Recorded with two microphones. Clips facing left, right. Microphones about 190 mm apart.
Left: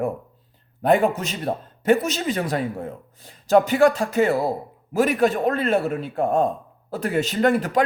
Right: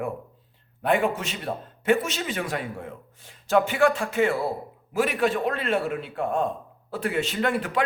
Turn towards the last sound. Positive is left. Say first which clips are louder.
# left 6 dB
turn(degrees=40)  # may be behind; listen again after turning